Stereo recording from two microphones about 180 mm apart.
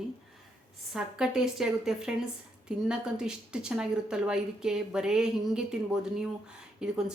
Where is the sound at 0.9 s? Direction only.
5° right (ahead or behind).